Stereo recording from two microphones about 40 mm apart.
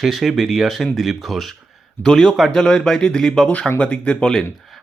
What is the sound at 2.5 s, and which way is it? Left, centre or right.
Speech, left.